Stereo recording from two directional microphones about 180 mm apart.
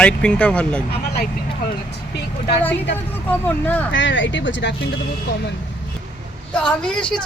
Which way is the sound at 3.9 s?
90° left.